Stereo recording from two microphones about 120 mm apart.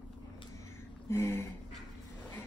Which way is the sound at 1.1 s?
20° left (ahead or behind).